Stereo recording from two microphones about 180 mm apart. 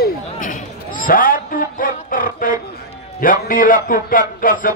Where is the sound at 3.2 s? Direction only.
50° left (ahead or behind).